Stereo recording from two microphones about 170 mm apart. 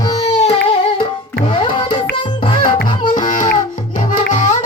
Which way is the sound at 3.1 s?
50° left (ahead or behind).